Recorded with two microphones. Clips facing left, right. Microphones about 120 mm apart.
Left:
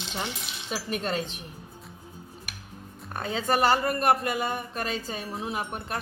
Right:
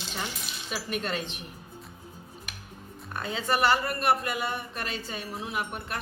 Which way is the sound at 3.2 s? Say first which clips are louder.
Left 2 dB; 40° left (ahead or behind).